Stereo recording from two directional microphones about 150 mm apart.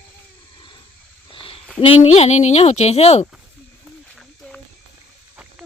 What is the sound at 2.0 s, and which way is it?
Speech, 45° left (ahead or behind).